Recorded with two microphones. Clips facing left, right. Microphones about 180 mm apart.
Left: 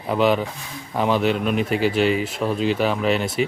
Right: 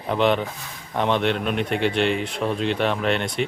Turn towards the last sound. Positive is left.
turn(degrees=5)  # may be behind; listen again after turning